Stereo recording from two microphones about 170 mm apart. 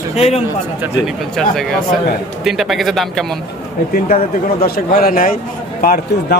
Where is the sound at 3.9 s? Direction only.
60° left (ahead or behind).